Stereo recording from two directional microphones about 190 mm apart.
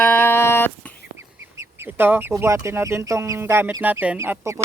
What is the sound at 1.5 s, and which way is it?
Speech, 15° right (ahead or behind).